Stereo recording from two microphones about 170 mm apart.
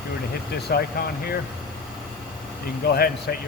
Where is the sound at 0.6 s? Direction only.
75° left (ahead or behind).